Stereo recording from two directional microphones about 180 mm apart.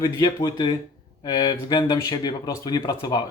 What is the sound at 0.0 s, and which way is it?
A man's voice, 20° left (ahead or behind).